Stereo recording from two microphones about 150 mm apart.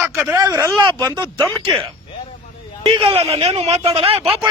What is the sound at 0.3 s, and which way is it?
Speech, 20° right (ahead or behind).